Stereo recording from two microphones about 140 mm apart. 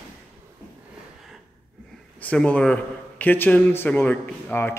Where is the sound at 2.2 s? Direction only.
10° left (ahead or behind).